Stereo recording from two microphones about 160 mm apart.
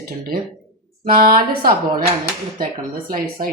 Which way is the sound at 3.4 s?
55° right (ahead or behind).